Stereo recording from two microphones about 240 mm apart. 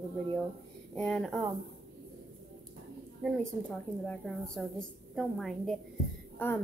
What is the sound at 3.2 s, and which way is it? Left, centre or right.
A woman's voice, centre.